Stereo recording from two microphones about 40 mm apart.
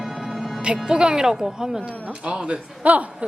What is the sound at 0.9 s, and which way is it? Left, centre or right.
Speech, centre.